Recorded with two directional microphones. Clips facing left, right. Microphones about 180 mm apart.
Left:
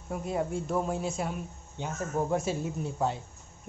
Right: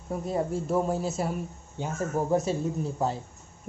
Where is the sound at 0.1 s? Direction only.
Centre (ahead or behind).